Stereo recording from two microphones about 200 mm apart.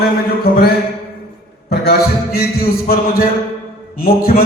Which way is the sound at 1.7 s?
50° left (ahead or behind).